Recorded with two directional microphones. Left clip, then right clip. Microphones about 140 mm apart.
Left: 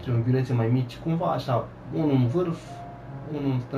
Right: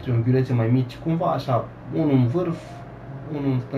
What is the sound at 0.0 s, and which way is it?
Speech, 20° right (ahead or behind).